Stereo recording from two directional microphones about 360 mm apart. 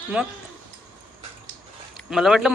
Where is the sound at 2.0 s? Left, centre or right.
Centre.